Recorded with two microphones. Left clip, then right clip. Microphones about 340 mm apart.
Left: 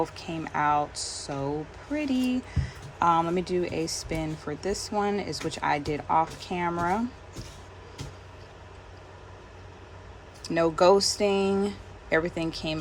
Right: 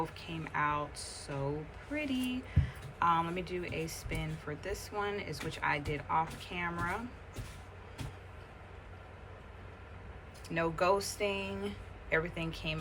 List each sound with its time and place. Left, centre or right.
0.0 s speech: centre
10.4 s speech: centre